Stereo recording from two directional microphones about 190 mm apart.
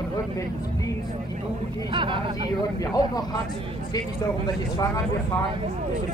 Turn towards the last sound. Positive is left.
turn(degrees=20)  # may be behind; listen again after turning